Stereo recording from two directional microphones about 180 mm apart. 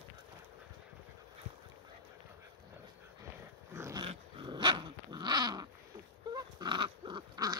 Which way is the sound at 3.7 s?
15° right (ahead or behind).